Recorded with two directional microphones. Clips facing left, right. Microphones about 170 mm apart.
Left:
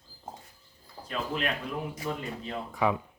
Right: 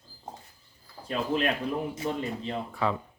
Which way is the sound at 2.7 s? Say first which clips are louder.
Left 3 dB; 15° left (ahead or behind).